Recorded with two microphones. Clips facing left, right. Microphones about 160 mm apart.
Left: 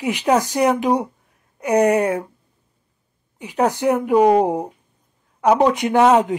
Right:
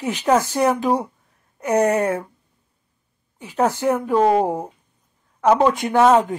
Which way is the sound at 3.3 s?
15° left (ahead or behind).